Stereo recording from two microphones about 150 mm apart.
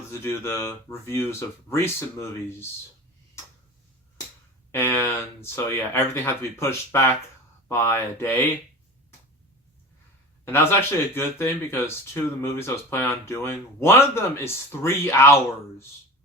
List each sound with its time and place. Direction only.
0.1 s speech: 15° left (ahead or behind)
4.7 s speech: 15° left (ahead or behind)
10.4 s speech: 15° left (ahead or behind)